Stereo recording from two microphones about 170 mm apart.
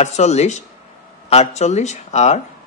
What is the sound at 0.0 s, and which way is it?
Speech, 40° left (ahead or behind).